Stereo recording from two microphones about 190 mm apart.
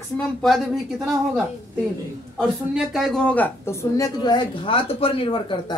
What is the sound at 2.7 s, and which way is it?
A woman's voice, centre (ahead or behind).